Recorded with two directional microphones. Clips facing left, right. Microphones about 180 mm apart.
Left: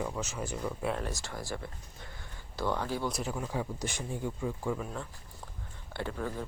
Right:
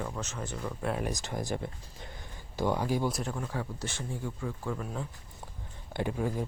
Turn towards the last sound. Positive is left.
turn(degrees=-15)  # may be behind; listen again after turning